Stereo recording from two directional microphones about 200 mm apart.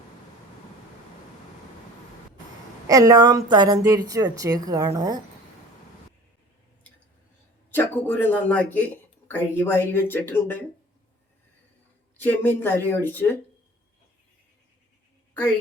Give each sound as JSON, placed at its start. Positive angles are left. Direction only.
{"t": 2.8, "sound": "speech", "side_deg": -15}
{"t": 7.7, "sound": "speech", "side_deg": 10}
{"t": 12.1, "sound": "speech", "side_deg": 10}